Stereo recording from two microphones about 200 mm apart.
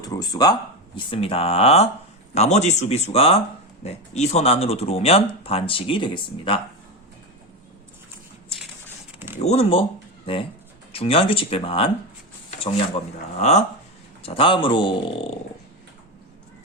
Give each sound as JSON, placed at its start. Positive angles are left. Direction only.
{"t": 0.0, "sound": "speech", "side_deg": 20}
{"t": 9.1, "sound": "a sound", "side_deg": -10}
{"t": 9.4, "sound": "speech", "side_deg": 30}
{"t": 10.9, "sound": "speech", "side_deg": 30}
{"t": 13.3, "sound": "speech", "side_deg": 35}